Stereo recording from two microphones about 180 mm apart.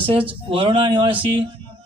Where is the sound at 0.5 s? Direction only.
30° right (ahead or behind).